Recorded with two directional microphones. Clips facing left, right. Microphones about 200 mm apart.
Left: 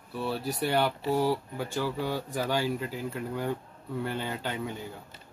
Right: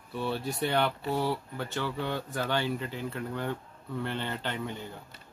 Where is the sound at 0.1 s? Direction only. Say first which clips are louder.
Left 1 dB; centre (ahead or behind).